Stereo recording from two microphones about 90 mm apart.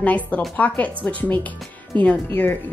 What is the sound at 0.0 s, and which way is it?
Speech, 15° left (ahead or behind).